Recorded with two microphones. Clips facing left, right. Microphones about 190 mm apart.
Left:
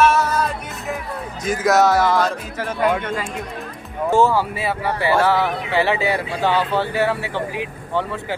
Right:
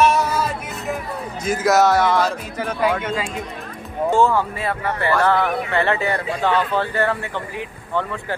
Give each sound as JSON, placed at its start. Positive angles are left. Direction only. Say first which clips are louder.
{"t": 0.0, "sound": "music", "louder": "left 1 dB", "side_deg": -10}
{"t": 1.4, "sound": "speech", "louder": "even", "side_deg": 0}
{"t": 4.1, "sound": "speech", "louder": "left 1 dB", "side_deg": 5}